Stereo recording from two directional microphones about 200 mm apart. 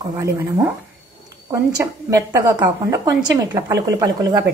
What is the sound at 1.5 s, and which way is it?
A woman's voice, 15° right (ahead or behind).